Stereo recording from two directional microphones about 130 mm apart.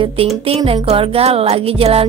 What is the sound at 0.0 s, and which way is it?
Speech, 50° right (ahead or behind).